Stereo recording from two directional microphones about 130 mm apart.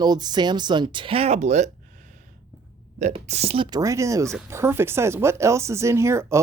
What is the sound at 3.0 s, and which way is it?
Speech, 60° right (ahead or behind).